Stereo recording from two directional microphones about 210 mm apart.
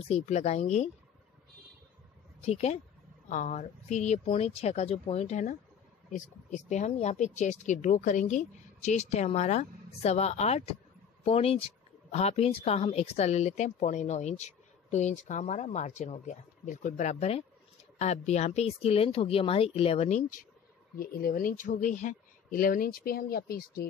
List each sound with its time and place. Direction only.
0.0 s a woman's voice: 30° left (ahead or behind)
2.4 s a woman's voice: 30° left (ahead or behind); by 23.9 s 45° left (ahead or behind)